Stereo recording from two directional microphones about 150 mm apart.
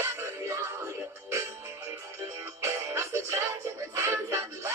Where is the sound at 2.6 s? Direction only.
20° right (ahead or behind).